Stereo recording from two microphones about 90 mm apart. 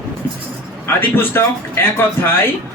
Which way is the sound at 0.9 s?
25° left (ahead or behind).